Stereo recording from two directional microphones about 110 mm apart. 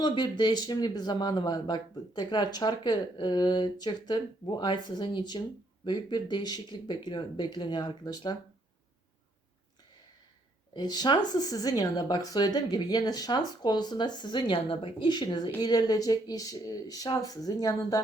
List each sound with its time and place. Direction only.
0.0 s speech: 45° left (ahead or behind)
10.8 s speech: 40° left (ahead or behind)
15.6 s speech: 35° left (ahead or behind)